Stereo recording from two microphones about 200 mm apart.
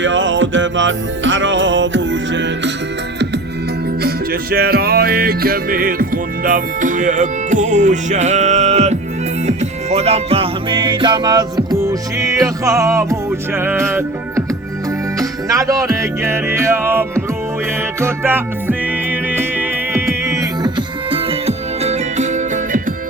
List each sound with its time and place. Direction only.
0.0 s music: 70° right (ahead or behind)
4.0 s music: 50° right (ahead or behind)